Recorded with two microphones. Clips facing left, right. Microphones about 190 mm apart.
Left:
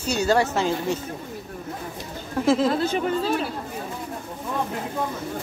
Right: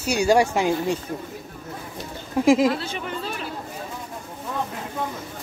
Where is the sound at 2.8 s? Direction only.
40° left (ahead or behind).